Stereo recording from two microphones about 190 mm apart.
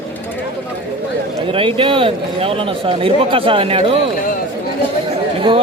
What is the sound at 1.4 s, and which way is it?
A man's voice, 30° right (ahead or behind).